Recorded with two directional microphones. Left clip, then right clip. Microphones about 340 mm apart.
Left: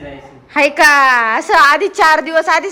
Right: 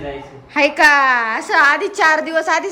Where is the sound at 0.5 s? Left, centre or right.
Centre.